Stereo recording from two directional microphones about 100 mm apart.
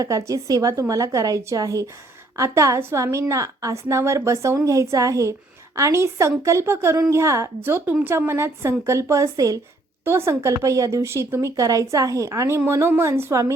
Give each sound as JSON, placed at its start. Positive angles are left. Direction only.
{"t": 0.3, "sound": "a woman's voice", "side_deg": -35}
{"t": 10.0, "sound": "speech", "side_deg": -25}